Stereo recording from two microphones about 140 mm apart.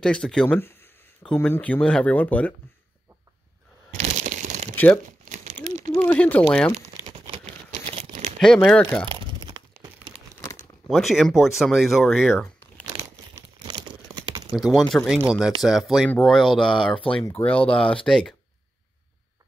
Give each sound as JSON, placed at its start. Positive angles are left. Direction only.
{"t": 0.0, "sound": "speech", "side_deg": 5}
{"t": 0.6, "sound": "speech", "side_deg": 15}
{"t": 4.0, "sound": "a sound", "side_deg": -60}
{"t": 4.7, "sound": "speech", "side_deg": 15}
{"t": 5.3, "sound": "crumpling", "side_deg": -60}
{"t": 5.9, "sound": "speech", "side_deg": 10}
{"t": 7.9, "sound": "crumpling", "side_deg": -45}
{"t": 8.4, "sound": "speech", "side_deg": 5}
{"t": 9.1, "sound": "a sound", "side_deg": -30}
{"t": 10.4, "sound": "crumpling", "side_deg": 20}
{"t": 10.9, "sound": "speech", "side_deg": 0}
{"t": 13.3, "sound": "crumpling", "side_deg": -30}
{"t": 14.5, "sound": "speech", "side_deg": 0}